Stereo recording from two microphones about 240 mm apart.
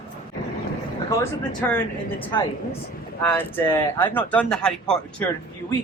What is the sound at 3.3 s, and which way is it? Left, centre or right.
Speech, centre.